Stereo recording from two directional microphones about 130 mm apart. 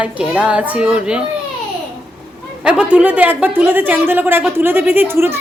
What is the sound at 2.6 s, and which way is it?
Speech, 10° right (ahead or behind).